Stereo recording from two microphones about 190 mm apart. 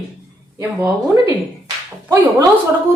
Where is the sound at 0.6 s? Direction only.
15° right (ahead or behind).